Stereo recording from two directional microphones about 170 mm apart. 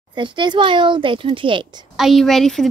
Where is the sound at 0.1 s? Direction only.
30° right (ahead or behind).